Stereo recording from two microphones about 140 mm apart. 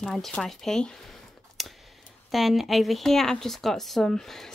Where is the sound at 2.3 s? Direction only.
Centre (ahead or behind).